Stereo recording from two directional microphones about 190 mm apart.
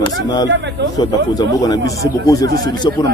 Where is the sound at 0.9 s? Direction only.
20° left (ahead or behind).